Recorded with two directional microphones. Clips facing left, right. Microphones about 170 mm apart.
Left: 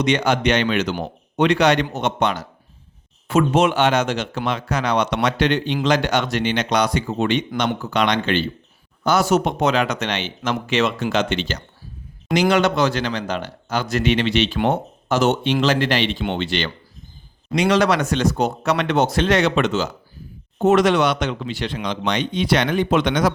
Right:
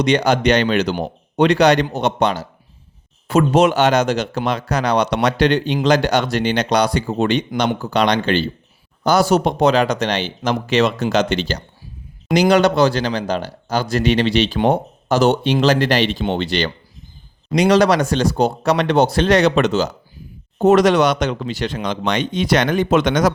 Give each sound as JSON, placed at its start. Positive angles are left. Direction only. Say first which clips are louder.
{"t": 0.0, "sound": "speech", "louder": "right 3 dB", "side_deg": -35}